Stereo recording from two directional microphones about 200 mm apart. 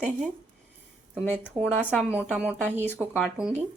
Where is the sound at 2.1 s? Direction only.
5° right (ahead or behind).